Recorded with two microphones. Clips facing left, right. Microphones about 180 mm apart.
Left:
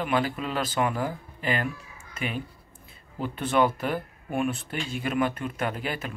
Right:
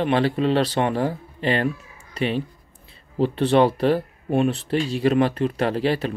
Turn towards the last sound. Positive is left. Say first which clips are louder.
# right 9 dB
turn(degrees=-35)  # may be behind; listen again after turning